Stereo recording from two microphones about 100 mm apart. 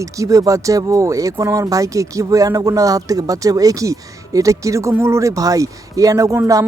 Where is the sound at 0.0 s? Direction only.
35° right (ahead or behind).